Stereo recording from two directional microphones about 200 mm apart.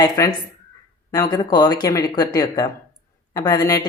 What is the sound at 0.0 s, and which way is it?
A woman's voice, 20° left (ahead or behind).